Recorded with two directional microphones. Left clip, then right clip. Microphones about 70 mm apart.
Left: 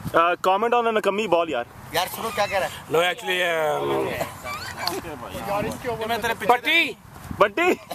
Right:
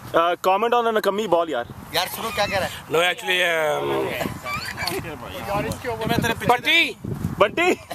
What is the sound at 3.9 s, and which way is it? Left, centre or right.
Speech, left.